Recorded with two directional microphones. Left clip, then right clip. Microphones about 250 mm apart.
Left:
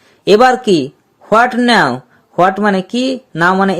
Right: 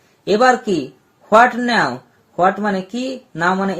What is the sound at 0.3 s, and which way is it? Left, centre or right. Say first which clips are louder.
Speech: left 5 dB; left.